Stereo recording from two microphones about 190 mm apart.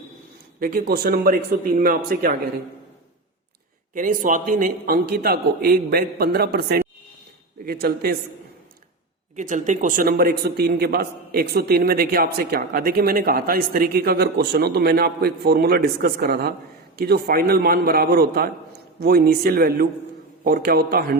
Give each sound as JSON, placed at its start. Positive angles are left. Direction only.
{"t": 0.6, "sound": "speech", "side_deg": -50}
{"t": 3.9, "sound": "speech", "side_deg": -45}
{"t": 9.3, "sound": "speech", "side_deg": -40}